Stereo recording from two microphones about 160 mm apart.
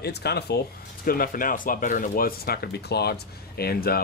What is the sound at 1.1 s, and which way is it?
Speech, 60° left (ahead or behind).